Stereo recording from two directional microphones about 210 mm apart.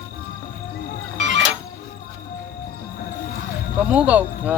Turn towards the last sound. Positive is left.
turn(degrees=-5)  # may be behind; listen again after turning